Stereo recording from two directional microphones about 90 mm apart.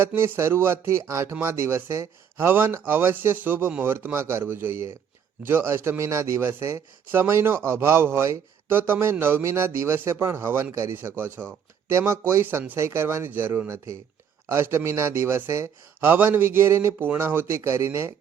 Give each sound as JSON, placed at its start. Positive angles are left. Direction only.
{"t": 0.1, "sound": "a man's voice", "side_deg": -20}